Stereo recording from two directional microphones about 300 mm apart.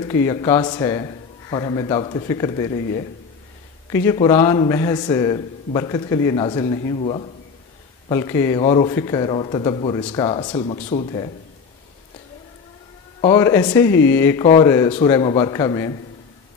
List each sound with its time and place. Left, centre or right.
0.1 s a man's voice: centre
3.9 s a man's voice: centre
13.2 s a man's voice: centre